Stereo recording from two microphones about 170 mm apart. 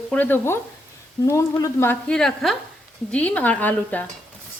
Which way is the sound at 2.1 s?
5° left (ahead or behind).